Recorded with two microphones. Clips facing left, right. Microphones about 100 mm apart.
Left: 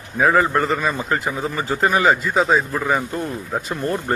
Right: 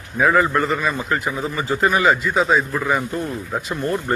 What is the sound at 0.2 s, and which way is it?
Speech, 30° left (ahead or behind).